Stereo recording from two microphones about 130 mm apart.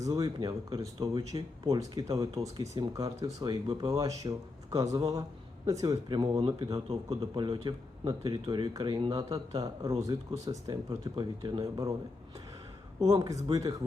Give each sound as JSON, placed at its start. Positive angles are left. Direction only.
{"t": 0.0, "sound": "speech", "side_deg": -30}
{"t": 6.8, "sound": "speech", "side_deg": -45}
{"t": 10.0, "sound": "speech", "side_deg": -25}
{"t": 13.0, "sound": "speech", "side_deg": -25}